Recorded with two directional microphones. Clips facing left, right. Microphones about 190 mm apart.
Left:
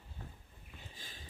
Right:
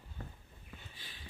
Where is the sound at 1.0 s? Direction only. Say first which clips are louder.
Left 2 dB; 45° left (ahead or behind).